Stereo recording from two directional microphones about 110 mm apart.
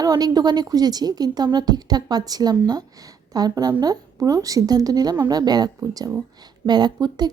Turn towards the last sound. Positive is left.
turn(degrees=-35)  # may be behind; listen again after turning